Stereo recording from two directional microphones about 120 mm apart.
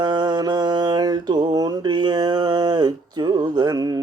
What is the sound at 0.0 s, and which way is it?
Mantra, 35° right (ahead or behind).